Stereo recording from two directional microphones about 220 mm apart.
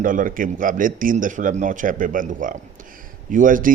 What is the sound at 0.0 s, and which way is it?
A man's voice, 40° right (ahead or behind).